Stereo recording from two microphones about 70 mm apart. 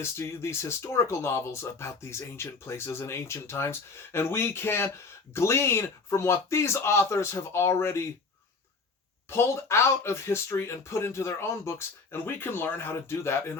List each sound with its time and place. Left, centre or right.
0.0 s speech: left
9.3 s speech: left